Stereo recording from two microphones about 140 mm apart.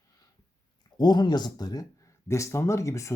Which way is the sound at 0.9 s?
30° left (ahead or behind).